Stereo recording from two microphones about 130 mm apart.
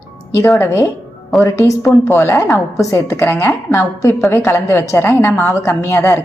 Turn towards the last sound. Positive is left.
turn(degrees=20)  # may be behind; listen again after turning